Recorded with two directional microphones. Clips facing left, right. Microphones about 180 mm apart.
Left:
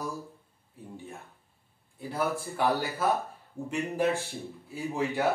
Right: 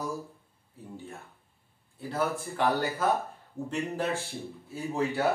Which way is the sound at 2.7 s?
Centre (ahead or behind).